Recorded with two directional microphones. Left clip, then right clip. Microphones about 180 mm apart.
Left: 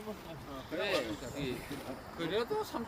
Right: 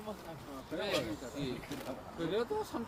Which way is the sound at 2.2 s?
55° right (ahead or behind).